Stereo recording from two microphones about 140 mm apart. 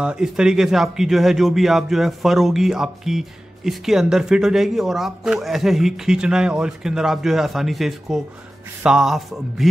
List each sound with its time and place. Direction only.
0.0 s speech: 5° right (ahead or behind)